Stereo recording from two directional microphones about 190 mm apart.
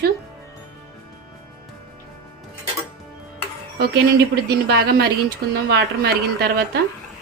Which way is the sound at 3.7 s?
55° right (ahead or behind).